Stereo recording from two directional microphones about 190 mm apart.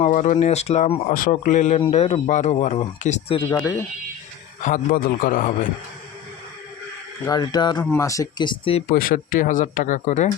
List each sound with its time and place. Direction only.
0.0 s speech: 40° left (ahead or behind); by 3.8 s 20° left (ahead or behind)
4.6 s speech: 45° left (ahead or behind)
7.3 s speech: 20° left (ahead or behind)
8.9 s speech: 45° left (ahead or behind)